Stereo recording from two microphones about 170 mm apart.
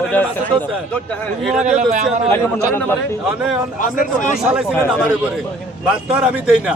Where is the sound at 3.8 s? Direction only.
50° left (ahead or behind).